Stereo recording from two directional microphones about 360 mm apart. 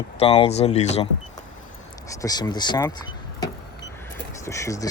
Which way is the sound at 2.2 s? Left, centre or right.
Centre.